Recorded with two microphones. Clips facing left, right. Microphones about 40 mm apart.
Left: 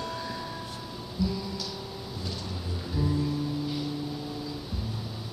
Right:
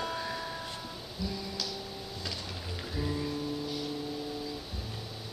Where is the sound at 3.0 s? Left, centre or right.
Centre.